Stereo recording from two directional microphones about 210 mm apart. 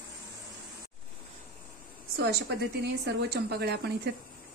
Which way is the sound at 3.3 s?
50° right (ahead or behind).